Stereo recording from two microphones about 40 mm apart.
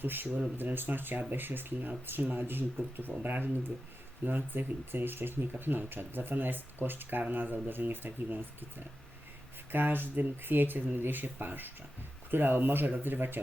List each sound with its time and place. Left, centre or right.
0.0 s speech: right
7.2 s speech: right
9.7 s speech: right